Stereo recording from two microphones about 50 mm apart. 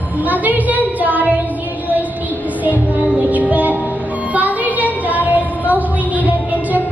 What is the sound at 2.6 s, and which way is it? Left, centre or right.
Music, right.